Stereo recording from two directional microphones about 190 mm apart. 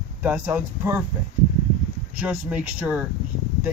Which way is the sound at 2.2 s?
5° right (ahead or behind).